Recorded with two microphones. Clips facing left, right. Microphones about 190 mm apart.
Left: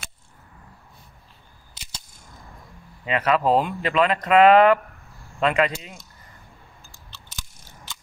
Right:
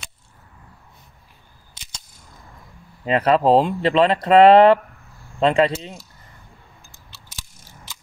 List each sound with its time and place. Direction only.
1.8 s cap gun: 5° left (ahead or behind)
3.1 s speech: 35° right (ahead or behind)